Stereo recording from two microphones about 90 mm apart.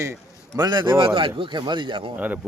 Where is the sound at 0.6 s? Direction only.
55° right (ahead or behind).